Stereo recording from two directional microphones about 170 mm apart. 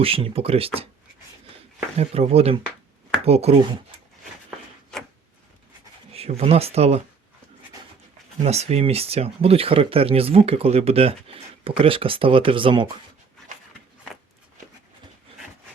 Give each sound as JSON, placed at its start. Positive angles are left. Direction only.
{"t": 0.0, "sound": "speech", "side_deg": -30}
{"t": 2.0, "sound": "speech", "side_deg": -35}
{"t": 6.1, "sound": "speech", "side_deg": -35}
{"t": 8.4, "sound": "speech", "side_deg": -40}